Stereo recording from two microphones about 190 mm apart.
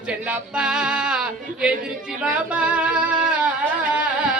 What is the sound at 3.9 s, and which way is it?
Carnatic music, 5° right (ahead or behind).